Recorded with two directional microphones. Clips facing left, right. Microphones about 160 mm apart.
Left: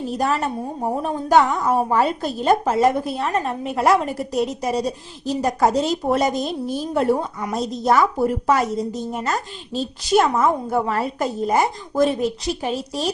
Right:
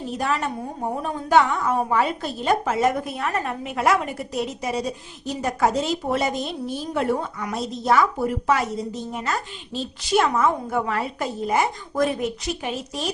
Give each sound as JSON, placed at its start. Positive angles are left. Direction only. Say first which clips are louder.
{"t": 0.1, "sound": "a woman's voice", "louder": "left 2 dB", "side_deg": 40}